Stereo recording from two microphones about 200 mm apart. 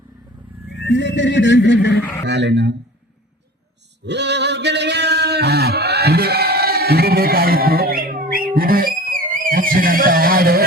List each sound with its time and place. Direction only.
0.9 s speech: 60° left (ahead or behind)
2.2 s speech: 60° right (ahead or behind)
4.0 s a sound: 60° right (ahead or behind)